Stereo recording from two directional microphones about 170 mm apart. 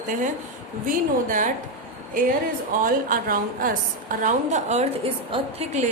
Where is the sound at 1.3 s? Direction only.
50° right (ahead or behind).